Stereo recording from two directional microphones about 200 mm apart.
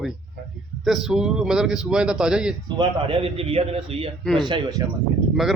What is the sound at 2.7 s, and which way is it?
A man's voice, 25° right (ahead or behind).